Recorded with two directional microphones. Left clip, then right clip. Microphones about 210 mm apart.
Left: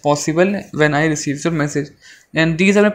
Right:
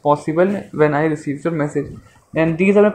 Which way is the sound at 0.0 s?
45° left (ahead or behind).